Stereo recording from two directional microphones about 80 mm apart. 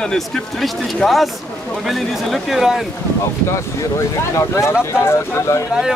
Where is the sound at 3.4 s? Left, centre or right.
Left.